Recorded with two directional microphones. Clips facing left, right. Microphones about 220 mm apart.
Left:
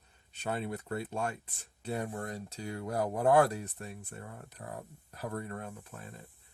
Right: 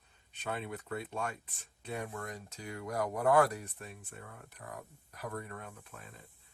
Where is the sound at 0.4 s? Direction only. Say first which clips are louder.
Left 4 dB; 35° left (ahead or behind).